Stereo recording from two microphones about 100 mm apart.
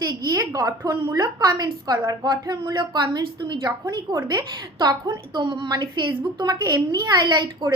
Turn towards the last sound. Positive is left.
turn(degrees=-45)  # may be behind; listen again after turning